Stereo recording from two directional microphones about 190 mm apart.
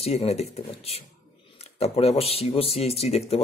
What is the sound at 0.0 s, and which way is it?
Speech, 35° left (ahead or behind).